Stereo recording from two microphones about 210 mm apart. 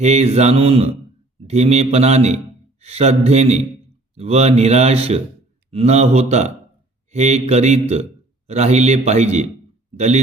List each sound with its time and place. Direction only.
0.0 s a man's voice: 30° right (ahead or behind)